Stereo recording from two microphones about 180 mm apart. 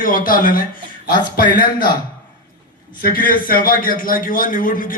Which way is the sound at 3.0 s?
50° left (ahead or behind).